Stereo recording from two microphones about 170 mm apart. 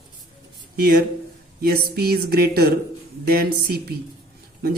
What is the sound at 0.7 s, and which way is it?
Speech, 65° right (ahead or behind).